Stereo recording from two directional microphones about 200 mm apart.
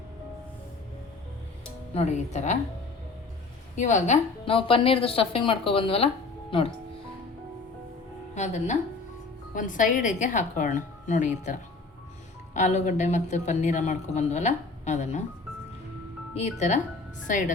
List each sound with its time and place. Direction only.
1.9 s speech: 35° left (ahead or behind)
3.8 s a woman's voice: 35° left (ahead or behind)
8.4 s speech: 35° left (ahead or behind)
16.3 s speech: 35° left (ahead or behind)